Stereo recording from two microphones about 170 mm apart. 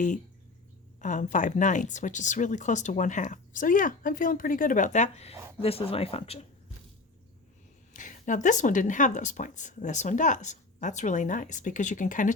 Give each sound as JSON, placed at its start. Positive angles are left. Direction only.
{"t": 1.0, "sound": "speech", "side_deg": 50}
{"t": 7.9, "sound": "speech", "side_deg": 50}